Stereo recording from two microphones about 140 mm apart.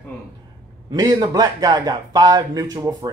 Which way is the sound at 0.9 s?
25° right (ahead or behind).